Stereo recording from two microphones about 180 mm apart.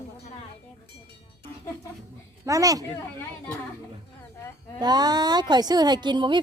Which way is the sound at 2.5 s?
20° right (ahead or behind).